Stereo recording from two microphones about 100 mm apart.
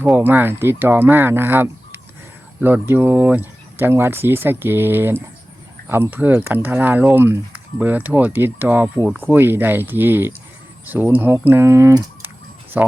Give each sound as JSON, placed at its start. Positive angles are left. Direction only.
{"t": 0.0, "sound": "speech", "side_deg": -20}